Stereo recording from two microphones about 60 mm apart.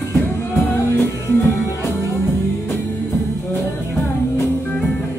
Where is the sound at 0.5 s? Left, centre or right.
Left.